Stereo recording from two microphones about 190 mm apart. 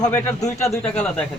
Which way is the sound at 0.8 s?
5° left (ahead or behind).